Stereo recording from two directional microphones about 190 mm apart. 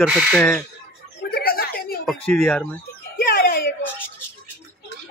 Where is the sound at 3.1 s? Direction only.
50° left (ahead or behind).